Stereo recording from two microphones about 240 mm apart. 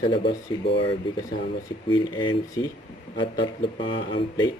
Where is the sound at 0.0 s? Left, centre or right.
Left.